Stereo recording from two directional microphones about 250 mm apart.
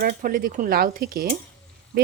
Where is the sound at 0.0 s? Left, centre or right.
Right.